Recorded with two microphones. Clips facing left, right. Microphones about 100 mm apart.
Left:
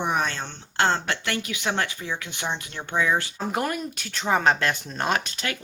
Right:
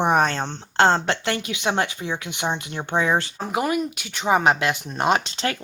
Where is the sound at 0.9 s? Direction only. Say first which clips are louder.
Right 4 dB; 25° right (ahead or behind).